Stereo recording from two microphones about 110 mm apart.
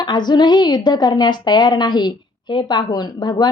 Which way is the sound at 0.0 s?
40° left (ahead or behind).